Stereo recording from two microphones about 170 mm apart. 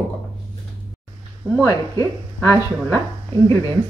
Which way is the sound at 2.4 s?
15° left (ahead or behind).